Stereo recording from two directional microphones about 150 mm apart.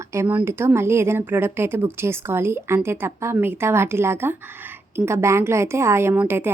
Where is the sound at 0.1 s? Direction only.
15° right (ahead or behind).